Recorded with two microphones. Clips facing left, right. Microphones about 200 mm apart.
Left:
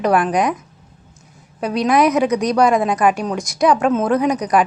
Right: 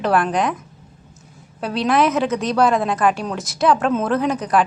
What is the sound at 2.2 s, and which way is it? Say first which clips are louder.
Speech: left 3 dB; 15° left (ahead or behind).